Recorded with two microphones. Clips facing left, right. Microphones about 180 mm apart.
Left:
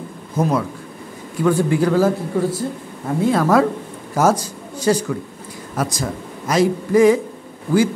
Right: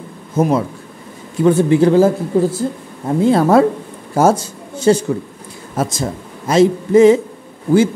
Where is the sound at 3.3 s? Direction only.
30° right (ahead or behind).